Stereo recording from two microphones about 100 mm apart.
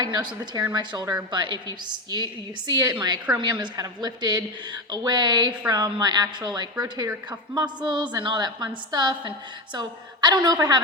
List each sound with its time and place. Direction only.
0.0 s a woman's voice: 45° right (ahead or behind)